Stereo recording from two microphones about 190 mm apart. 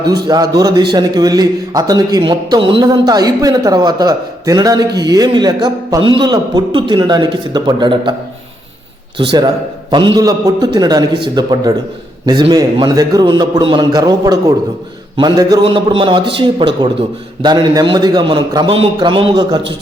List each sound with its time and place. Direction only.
0.1 s a man's voice: 20° right (ahead or behind)
9.1 s a man's voice: 25° right (ahead or behind)